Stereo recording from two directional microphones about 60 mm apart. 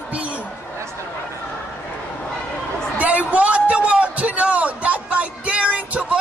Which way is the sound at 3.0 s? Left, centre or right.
Right.